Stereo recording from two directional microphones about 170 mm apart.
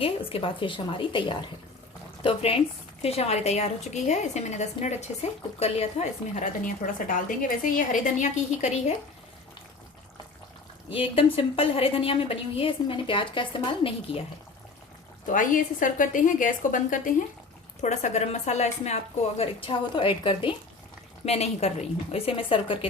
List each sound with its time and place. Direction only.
0.0 s a woman's voice: 35° left (ahead or behind)
10.9 s a woman's voice: 35° left (ahead or behind)
15.3 s a woman's voice: 50° left (ahead or behind)
19.4 s a woman's voice: 30° left (ahead or behind)